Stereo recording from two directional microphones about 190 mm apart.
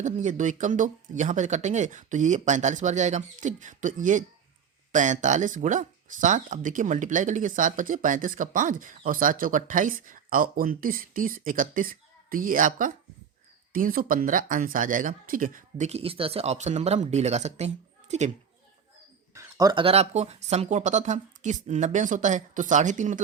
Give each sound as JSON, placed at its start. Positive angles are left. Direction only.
{"t": 0.0, "sound": "speech", "side_deg": -40}
{"t": 19.3, "sound": "speech", "side_deg": -15}